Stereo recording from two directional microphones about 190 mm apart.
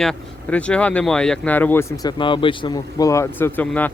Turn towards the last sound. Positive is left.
turn(degrees=10)  # may be behind; listen again after turning